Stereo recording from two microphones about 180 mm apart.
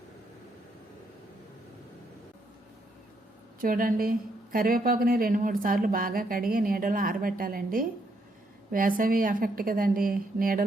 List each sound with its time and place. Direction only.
3.6 s a woman's voice: 50° right (ahead or behind)